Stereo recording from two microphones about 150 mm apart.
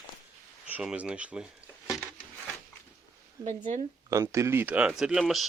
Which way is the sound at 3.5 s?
55° right (ahead or behind).